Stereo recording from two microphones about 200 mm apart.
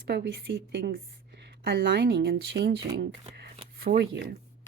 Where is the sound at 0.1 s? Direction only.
55° right (ahead or behind).